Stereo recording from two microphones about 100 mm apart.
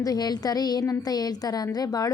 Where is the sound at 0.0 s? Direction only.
40° left (ahead or behind).